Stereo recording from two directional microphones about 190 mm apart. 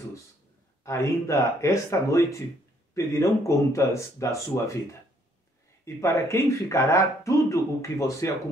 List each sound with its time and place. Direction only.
0.8 s speech: 15° left (ahead or behind)
5.9 s speech: 15° left (ahead or behind)